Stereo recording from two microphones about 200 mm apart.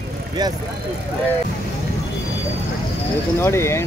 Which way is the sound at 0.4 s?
20° right (ahead or behind).